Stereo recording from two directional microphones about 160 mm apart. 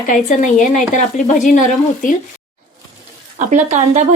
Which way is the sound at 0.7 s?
50° left (ahead or behind).